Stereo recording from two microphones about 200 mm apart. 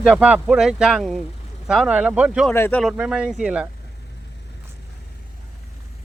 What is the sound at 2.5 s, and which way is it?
Speech, 10° left (ahead or behind).